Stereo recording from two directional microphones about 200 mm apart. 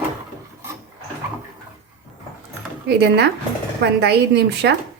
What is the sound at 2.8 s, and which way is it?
A woman's voice, 55° right (ahead or behind).